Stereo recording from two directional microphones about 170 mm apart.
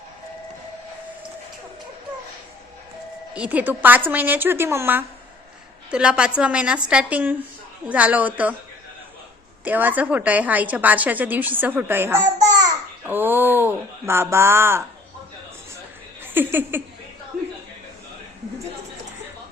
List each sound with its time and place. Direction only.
3.3 s a woman's voice: 10° right (ahead or behind)
9.6 s a woman's voice: 10° right (ahead or behind)
12.4 s babbling: 20° right (ahead or behind)
13.1 s a woman's voice: 10° right (ahead or behind)
16.2 s speech: 10° right (ahead or behind)
17.3 s a sound: 60° right (ahead or behind)